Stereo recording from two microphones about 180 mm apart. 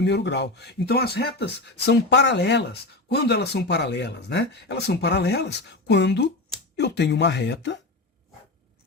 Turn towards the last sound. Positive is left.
turn(degrees=75)  # may be behind; listen again after turning